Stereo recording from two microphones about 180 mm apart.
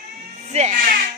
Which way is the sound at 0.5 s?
45° right (ahead or behind).